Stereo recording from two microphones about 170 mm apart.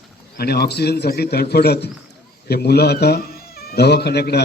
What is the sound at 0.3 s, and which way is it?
A man's voice, 70° left (ahead or behind).